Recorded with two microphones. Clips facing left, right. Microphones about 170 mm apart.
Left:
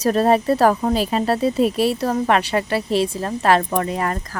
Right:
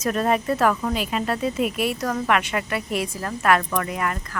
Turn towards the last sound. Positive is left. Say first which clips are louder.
# left 4 dB
turn(degrees=30)  # may be behind; listen again after turning